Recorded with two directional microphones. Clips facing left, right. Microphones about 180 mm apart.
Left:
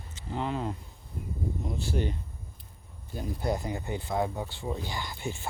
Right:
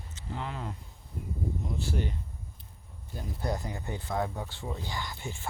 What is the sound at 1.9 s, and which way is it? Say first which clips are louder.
Speech: left 4 dB; 20° left (ahead or behind).